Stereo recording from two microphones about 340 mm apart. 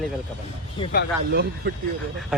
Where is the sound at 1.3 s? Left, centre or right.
Right.